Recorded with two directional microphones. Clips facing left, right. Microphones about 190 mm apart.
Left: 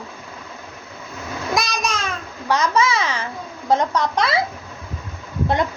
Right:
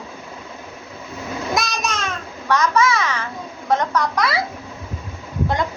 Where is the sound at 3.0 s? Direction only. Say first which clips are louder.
Even; 20° left (ahead or behind).